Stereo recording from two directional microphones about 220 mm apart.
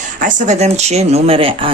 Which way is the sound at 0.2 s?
35° right (ahead or behind).